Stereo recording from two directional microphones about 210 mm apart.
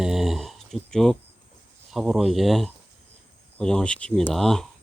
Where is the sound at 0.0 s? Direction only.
Centre (ahead or behind).